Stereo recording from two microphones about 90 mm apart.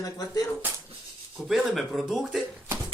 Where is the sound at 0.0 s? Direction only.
40° left (ahead or behind).